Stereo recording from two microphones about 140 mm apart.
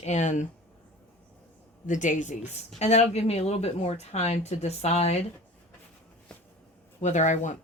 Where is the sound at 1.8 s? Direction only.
65° left (ahead or behind).